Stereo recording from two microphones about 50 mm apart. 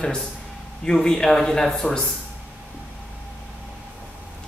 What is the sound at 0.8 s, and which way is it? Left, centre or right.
Speech, centre.